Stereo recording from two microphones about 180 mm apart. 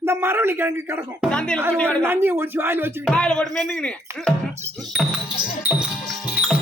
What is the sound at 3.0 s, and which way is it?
Speech, 5° left (ahead or behind).